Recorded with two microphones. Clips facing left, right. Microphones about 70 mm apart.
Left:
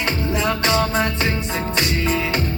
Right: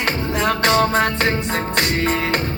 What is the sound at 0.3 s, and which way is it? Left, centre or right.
Music, right.